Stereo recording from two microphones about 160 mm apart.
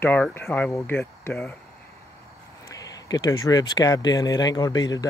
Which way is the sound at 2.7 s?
20° left (ahead or behind).